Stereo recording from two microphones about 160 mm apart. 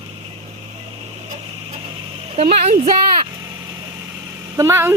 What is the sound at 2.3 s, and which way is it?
Speech, 40° right (ahead or behind).